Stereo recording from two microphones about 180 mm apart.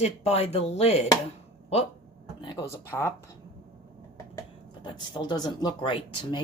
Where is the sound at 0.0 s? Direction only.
35° left (ahead or behind).